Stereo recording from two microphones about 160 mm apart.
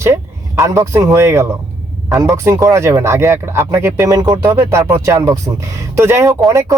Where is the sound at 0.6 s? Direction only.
20° right (ahead or behind).